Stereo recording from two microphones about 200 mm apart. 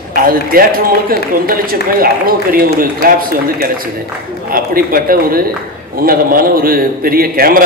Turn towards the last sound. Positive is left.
turn(degrees=-45)  # may be behind; listen again after turning